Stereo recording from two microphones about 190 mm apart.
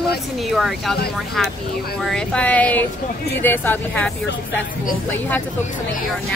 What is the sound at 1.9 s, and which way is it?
Speech, 5° left (ahead or behind).